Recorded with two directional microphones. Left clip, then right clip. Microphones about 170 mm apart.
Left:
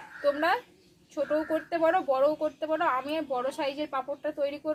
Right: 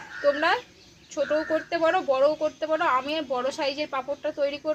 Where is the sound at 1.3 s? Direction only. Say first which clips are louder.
Right 3 dB; 30° left (ahead or behind).